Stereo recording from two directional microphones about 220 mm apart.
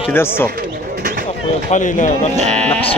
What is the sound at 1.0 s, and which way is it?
Bird, 45° right (ahead or behind).